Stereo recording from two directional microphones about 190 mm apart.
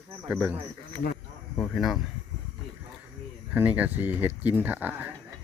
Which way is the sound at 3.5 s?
10° right (ahead or behind).